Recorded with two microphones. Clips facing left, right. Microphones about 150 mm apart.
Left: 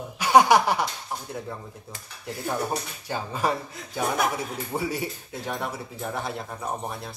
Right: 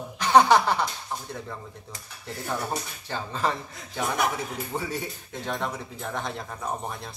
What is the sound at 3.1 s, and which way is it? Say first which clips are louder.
Speech: left 2 dB; 10° left (ahead or behind).